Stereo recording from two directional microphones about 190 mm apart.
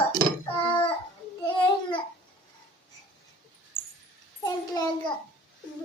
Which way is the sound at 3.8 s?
65° right (ahead or behind).